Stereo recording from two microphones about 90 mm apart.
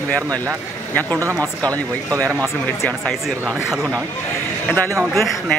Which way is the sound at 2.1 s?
35° right (ahead or behind).